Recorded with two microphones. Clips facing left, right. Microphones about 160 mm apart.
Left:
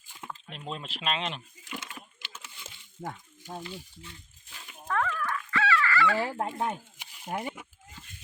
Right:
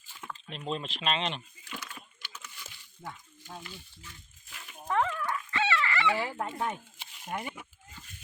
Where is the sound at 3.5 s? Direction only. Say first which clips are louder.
Left 6 dB; 30° left (ahead or behind).